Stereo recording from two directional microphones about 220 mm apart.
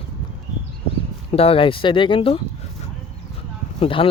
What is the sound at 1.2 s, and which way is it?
Speech, 25° left (ahead or behind).